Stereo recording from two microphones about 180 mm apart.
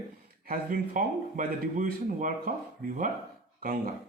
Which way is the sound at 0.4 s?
50° right (ahead or behind).